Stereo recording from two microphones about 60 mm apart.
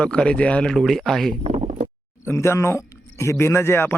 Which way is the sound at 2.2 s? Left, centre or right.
Left.